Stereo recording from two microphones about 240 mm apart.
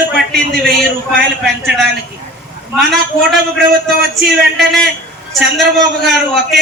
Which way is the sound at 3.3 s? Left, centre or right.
Centre.